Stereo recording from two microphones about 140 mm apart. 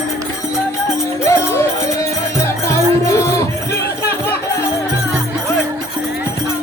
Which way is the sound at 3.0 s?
20° left (ahead or behind).